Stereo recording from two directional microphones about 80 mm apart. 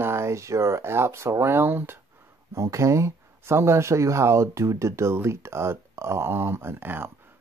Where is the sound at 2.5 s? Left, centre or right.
Right.